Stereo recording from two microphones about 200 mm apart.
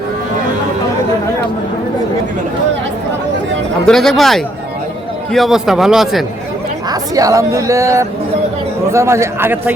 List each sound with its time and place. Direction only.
3.8 s a man's voice: centre (ahead or behind)
6.9 s speech: 15° right (ahead or behind)